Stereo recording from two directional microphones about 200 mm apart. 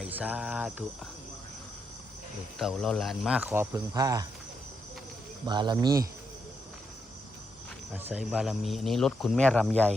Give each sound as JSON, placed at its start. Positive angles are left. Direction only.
{"t": 0.0, "sound": "speech", "side_deg": -5}
{"t": 2.6, "sound": "speech", "side_deg": 0}
{"t": 5.5, "sound": "speech", "side_deg": -20}
{"t": 7.9, "sound": "speech", "side_deg": -5}